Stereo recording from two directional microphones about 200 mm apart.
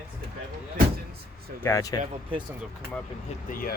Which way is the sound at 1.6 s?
15° left (ahead or behind).